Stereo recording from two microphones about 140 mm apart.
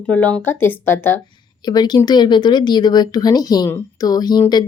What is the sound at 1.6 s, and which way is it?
Speech, 30° left (ahead or behind).